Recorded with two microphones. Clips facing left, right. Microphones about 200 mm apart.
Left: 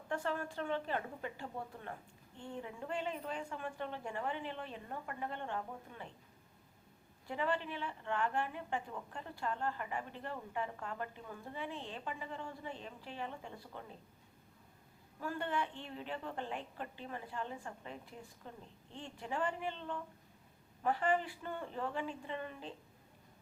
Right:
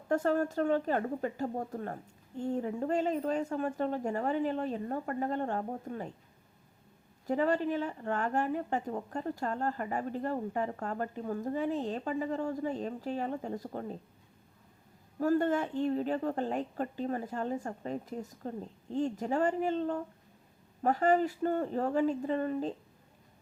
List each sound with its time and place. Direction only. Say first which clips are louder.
0.1 s a woman's voice: right 10 dB; 45° right (ahead or behind)
7.3 s a woman's voice: right 9 dB; 40° right (ahead or behind)
15.2 s a woman's voice: right 11 dB; 40° right (ahead or behind)